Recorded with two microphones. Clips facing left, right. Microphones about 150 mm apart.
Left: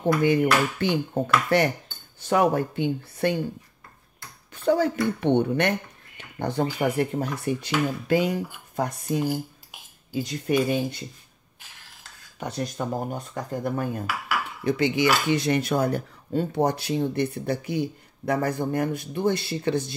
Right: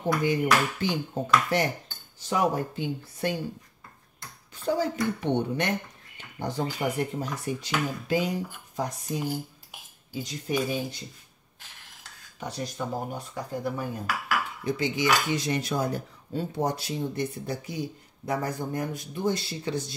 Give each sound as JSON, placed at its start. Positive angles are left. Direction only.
{"t": 0.2, "sound": "speech", "side_deg": 60}
{"t": 4.6, "sound": "speech", "side_deg": 65}
{"t": 12.4, "sound": "speech", "side_deg": 55}
{"t": 14.6, "sound": "speech", "side_deg": 65}